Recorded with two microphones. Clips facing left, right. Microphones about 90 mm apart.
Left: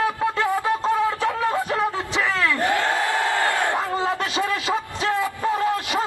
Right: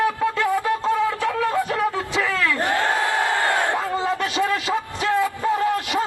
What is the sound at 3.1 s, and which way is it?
Crowd, 25° right (ahead or behind).